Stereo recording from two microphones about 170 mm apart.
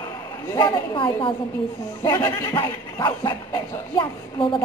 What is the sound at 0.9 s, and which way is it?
Speech, 30° left (ahead or behind).